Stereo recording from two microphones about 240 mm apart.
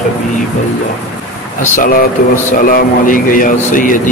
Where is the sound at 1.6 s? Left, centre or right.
Left.